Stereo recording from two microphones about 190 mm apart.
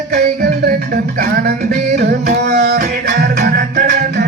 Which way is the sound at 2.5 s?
60° right (ahead or behind).